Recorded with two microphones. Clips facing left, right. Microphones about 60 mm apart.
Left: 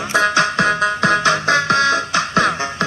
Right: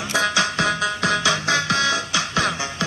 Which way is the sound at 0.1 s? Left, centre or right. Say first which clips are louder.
Left 6 dB; left.